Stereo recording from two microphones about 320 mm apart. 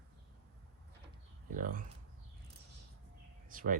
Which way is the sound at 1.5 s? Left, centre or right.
Right.